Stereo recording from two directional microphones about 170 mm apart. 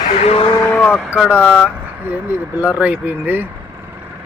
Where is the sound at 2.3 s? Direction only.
10° right (ahead or behind).